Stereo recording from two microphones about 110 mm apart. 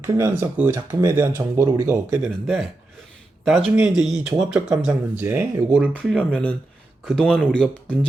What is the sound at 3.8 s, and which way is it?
Speech, 5° right (ahead or behind).